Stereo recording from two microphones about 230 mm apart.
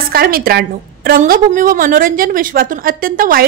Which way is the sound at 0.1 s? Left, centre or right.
Right.